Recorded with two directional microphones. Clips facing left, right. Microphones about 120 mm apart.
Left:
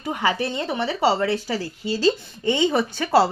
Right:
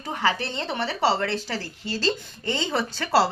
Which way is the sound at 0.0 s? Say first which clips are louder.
Left 2 dB; 15° left (ahead or behind).